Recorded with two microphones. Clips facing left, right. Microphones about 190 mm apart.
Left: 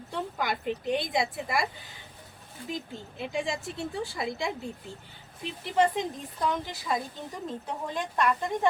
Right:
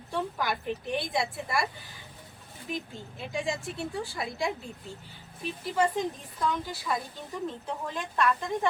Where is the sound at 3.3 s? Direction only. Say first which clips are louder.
Even; 25° left (ahead or behind).